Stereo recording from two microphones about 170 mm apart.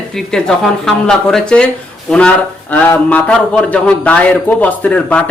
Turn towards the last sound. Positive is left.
turn(degrees=10)  # may be behind; listen again after turning